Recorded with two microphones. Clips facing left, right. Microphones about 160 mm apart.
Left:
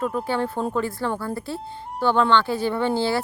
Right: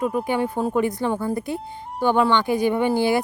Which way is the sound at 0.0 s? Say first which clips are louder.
Right 2 dB; 10° right (ahead or behind).